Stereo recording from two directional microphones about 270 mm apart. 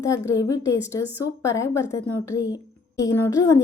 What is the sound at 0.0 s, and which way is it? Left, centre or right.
A woman's voice, centre.